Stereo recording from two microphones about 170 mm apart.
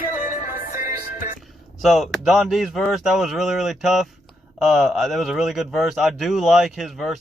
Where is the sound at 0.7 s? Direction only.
55° left (ahead or behind).